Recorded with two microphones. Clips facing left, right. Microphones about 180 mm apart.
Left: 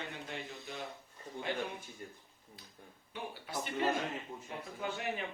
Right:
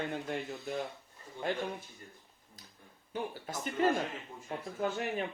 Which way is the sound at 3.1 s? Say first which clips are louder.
Right 5 dB; 45° right (ahead or behind).